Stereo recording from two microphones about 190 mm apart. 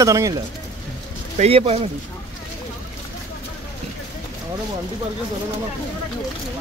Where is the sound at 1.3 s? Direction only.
35° right (ahead or behind).